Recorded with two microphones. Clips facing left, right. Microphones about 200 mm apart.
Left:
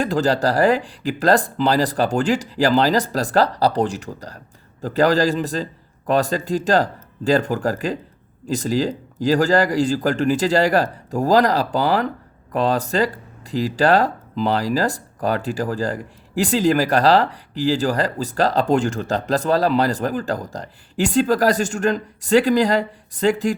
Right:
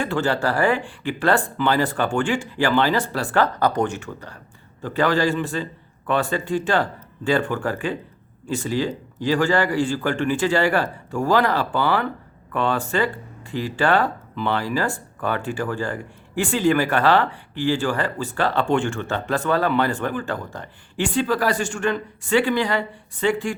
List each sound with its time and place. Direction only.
0.0 s speech: 35° left (ahead or behind)